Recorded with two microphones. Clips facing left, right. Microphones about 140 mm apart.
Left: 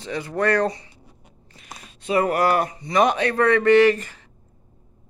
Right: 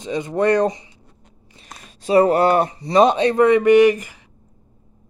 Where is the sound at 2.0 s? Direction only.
30° right (ahead or behind); by 4.2 s 15° right (ahead or behind).